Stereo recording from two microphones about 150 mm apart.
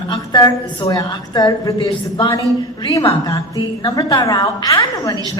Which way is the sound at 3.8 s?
25° left (ahead or behind).